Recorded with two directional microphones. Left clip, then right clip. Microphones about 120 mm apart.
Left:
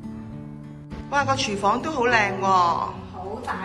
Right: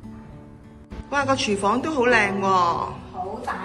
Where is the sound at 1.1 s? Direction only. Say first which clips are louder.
Right 1 dB; 5° left (ahead or behind).